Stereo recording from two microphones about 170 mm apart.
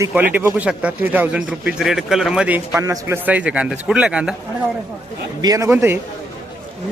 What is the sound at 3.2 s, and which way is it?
Speech, 10° right (ahead or behind).